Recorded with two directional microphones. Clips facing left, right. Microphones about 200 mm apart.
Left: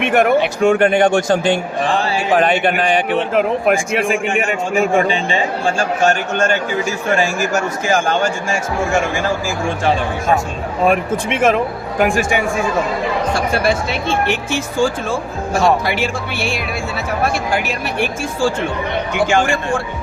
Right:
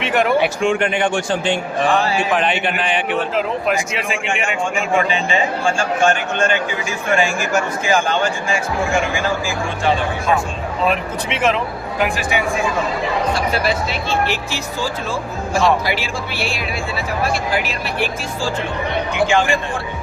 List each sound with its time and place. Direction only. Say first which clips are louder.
0.0 s a man's voice: left 3 dB; 50° left (ahead or behind)
9.8 s a man's voice: even; 45° left (ahead or behind)
13.5 s a man's voice: left 3 dB; 50° left (ahead or behind)
17.7 s a man's voice: left 2 dB; 50° left (ahead or behind)